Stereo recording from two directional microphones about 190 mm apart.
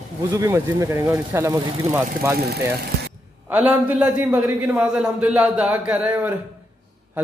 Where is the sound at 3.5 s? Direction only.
10° right (ahead or behind).